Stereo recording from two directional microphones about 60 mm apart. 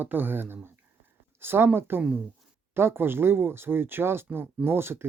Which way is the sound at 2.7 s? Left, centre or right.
Right.